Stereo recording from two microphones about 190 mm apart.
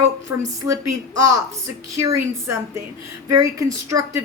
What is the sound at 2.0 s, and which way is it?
Speech, 15° right (ahead or behind).